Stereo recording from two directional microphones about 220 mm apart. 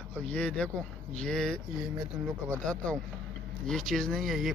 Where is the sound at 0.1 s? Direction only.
5° left (ahead or behind).